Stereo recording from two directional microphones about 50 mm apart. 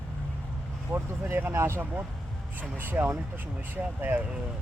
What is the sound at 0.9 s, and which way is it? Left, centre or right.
Speech, right.